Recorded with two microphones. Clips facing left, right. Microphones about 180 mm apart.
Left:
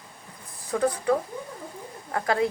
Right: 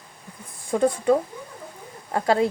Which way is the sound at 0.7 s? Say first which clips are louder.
Right 4 dB; 25° right (ahead or behind).